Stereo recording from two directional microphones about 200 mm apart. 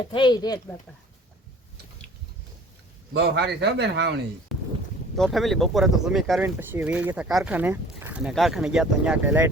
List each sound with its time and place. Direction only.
0.1 s speech: 25° left (ahead or behind)
3.1 s a man's voice: 55° right (ahead or behind)
4.5 s a sound: centre (ahead or behind)
5.1 s speech: centre (ahead or behind)